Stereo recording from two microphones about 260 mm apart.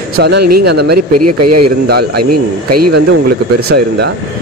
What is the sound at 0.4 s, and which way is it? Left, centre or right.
Speech, right.